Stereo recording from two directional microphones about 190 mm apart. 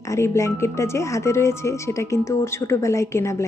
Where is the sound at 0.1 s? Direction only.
15° left (ahead or behind).